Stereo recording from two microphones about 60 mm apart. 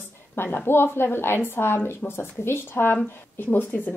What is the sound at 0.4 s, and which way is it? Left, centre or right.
Speech, left.